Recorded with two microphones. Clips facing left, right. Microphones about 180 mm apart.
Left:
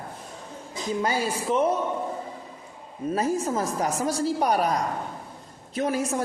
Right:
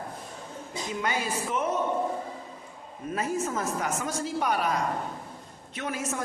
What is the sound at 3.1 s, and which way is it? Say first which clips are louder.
Speech: left 4 dB; 35° left (ahead or behind).